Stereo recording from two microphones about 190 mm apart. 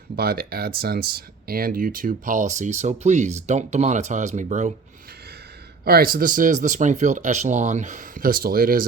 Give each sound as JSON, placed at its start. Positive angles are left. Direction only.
{"t": 0.2, "sound": "speech", "side_deg": -50}
{"t": 5.8, "sound": "speech", "side_deg": -50}